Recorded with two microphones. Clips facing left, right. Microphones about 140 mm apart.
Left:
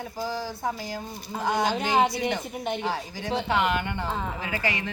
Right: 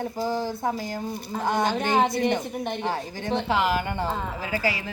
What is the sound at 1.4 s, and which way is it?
Speech, 50° right (ahead or behind).